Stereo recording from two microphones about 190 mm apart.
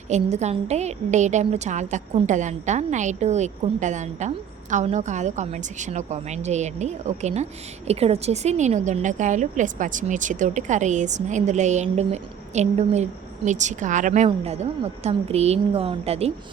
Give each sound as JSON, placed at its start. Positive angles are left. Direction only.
{"t": 0.1, "sound": "a woman's voice", "side_deg": -35}